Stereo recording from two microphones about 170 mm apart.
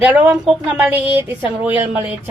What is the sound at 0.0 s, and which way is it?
Speech, 10° right (ahead or behind).